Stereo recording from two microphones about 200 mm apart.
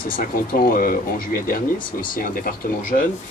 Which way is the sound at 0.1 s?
45° left (ahead or behind).